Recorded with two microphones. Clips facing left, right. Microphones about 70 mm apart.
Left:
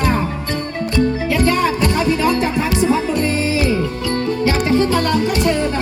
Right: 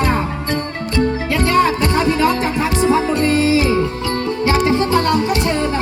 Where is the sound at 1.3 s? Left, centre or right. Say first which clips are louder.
Right 3 dB; right.